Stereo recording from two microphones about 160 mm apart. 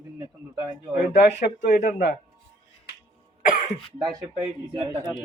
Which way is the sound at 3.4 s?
55° left (ahead or behind).